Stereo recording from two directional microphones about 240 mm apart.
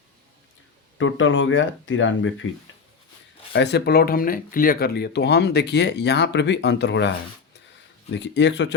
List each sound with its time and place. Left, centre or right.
0.9 s speech: left
3.5 s speech: left
8.1 s speech: left